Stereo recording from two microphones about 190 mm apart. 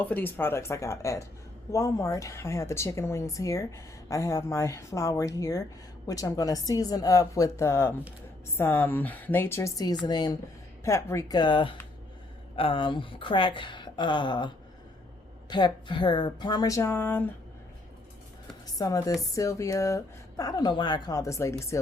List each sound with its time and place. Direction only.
0.0 s a woman's voice: 10° left (ahead or behind)
18.6 s speech: 20° left (ahead or behind)